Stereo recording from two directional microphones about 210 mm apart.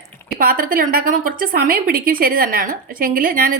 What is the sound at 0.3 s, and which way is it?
Speech, 45° right (ahead or behind).